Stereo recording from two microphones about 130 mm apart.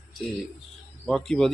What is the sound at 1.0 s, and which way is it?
Speech, 5° left (ahead or behind).